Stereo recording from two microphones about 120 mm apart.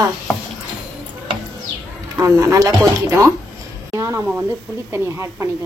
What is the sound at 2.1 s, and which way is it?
Speech, 25° right (ahead or behind).